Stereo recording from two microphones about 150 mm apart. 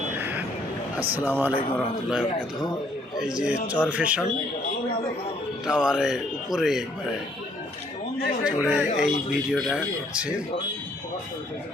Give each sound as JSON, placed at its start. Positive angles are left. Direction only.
{"t": 0.2, "sound": "vehicle", "side_deg": -10}
{"t": 1.2, "sound": "speech", "side_deg": -10}
{"t": 3.2, "sound": "speech", "side_deg": -5}
{"t": 5.6, "sound": "speech", "side_deg": -5}
{"t": 8.4, "sound": "speech", "side_deg": -5}